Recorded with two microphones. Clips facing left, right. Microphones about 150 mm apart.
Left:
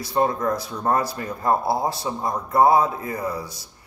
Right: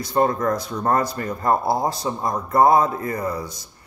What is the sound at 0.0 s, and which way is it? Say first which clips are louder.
Speech: right 2 dB; 5° left (ahead or behind).